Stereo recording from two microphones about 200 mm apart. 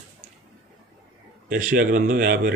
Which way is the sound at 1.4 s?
40° right (ahead or behind).